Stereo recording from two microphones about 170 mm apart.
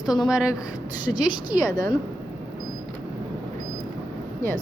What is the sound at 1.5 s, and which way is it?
Speech, 20° left (ahead or behind).